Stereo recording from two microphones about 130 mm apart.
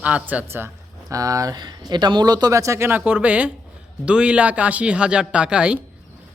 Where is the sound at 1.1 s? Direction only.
25° right (ahead or behind).